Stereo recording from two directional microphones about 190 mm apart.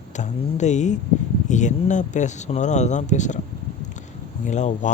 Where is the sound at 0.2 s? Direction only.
40° left (ahead or behind).